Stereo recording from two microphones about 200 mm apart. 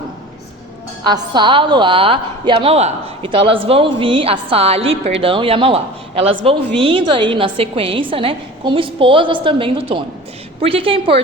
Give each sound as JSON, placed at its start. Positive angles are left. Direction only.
{"t": 1.0, "sound": "a woman's voice", "side_deg": -20}